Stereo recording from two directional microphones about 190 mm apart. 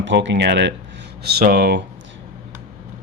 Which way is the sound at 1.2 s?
55° right (ahead or behind).